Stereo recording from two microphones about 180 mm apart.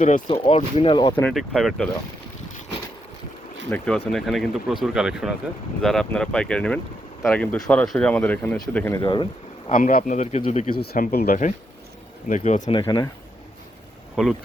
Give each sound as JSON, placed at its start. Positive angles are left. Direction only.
{"t": 0.3, "sound": "speech", "side_deg": 25}
{"t": 1.3, "sound": "speech", "side_deg": 0}
{"t": 3.7, "sound": "speech", "side_deg": 0}
{"t": 8.9, "sound": "speech", "side_deg": 25}
{"t": 9.6, "sound": "speech", "side_deg": 50}
{"t": 10.8, "sound": "speech", "side_deg": 55}
{"t": 12.8, "sound": "speech", "side_deg": 20}
{"t": 14.2, "sound": "speech", "side_deg": -5}